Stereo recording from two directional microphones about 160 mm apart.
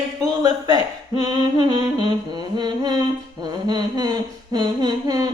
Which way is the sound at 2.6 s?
25° right (ahead or behind).